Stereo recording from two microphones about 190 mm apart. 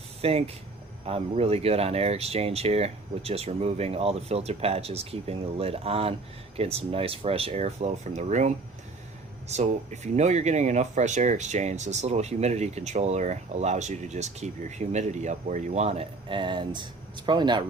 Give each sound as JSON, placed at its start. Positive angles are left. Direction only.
{"t": 0.2, "sound": "speech", "side_deg": -30}